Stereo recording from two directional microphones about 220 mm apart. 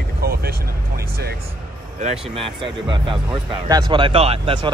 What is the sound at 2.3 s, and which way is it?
Speech, 25° right (ahead or behind).